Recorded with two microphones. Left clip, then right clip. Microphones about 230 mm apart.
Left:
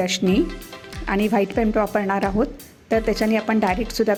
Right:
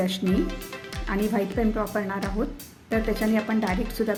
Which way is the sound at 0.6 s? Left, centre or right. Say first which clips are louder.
Even; centre.